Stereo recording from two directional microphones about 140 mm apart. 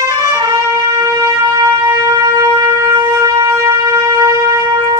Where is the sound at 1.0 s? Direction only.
25° right (ahead or behind).